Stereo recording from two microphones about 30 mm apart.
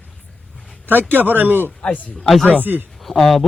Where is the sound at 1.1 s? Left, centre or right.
Right.